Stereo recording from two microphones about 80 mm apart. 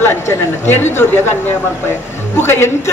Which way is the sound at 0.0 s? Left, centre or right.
Left.